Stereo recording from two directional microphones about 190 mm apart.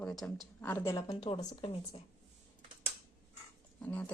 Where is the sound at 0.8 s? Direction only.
20° left (ahead or behind).